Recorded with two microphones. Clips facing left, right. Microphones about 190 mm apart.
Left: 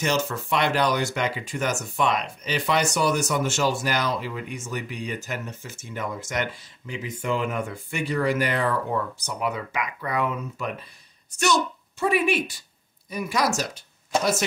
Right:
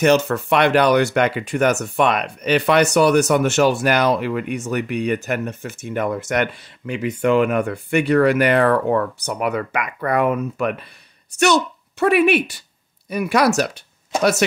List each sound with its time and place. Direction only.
0.0 s a woman's voice: 65° right (ahead or behind)